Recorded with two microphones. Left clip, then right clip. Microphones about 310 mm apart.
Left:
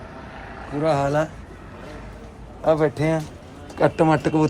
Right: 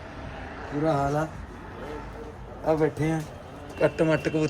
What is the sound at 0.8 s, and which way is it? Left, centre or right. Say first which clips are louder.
Speech: left 5 dB; left.